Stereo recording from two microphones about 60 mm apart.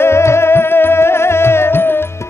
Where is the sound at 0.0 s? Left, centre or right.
Left.